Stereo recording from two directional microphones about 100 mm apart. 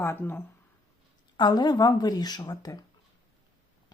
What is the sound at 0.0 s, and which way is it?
Speech, 20° left (ahead or behind).